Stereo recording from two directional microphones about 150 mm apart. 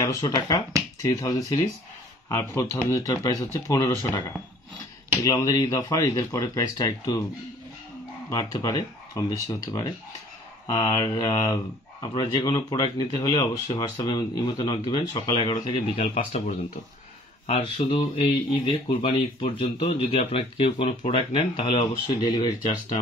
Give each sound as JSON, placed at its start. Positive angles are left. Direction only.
{"t": 0.0, "sound": "speech", "side_deg": 20}
{"t": 5.2, "sound": "speech", "side_deg": 25}
{"t": 8.3, "sound": "speech", "side_deg": 25}
{"t": 16.0, "sound": "speech", "side_deg": 55}
{"t": 17.5, "sound": "speech", "side_deg": 40}